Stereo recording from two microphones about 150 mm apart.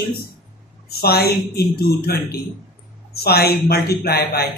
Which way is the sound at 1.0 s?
90° left.